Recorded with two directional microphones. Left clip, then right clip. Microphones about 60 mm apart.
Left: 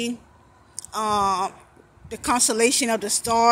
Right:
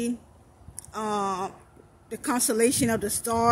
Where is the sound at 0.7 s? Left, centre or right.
Right.